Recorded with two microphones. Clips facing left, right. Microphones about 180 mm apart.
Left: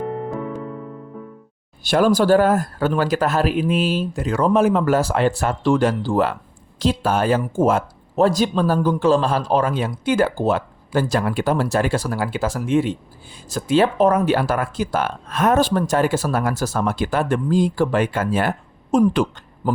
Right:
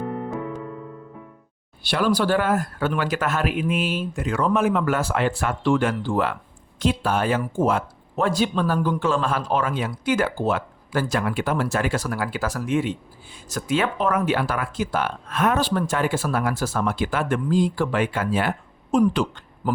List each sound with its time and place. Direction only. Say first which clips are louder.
1.8 s speech: left 5 dB; 45° left (ahead or behind)